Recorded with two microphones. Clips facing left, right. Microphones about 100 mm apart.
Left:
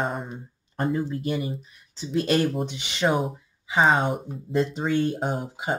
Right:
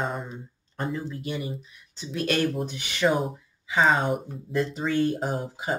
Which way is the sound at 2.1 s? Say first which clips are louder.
Left 3 dB; 30° left (ahead or behind).